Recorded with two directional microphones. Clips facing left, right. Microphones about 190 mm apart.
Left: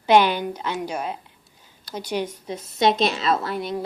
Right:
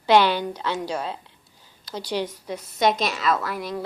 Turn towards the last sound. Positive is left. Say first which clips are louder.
# left 2 dB
turn(degrees=25)  # may be behind; listen again after turning